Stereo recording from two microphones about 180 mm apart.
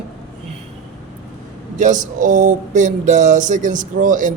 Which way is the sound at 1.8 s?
45° right (ahead or behind).